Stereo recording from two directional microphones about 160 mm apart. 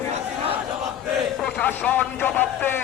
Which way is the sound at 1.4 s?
10° left (ahead or behind).